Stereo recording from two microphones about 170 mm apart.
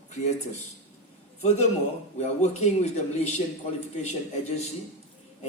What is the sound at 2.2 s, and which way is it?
Speech, 40° left (ahead or behind).